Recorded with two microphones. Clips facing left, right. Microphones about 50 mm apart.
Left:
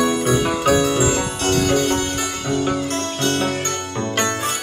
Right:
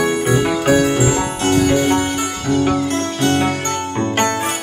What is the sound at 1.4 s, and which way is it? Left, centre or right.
Music, right.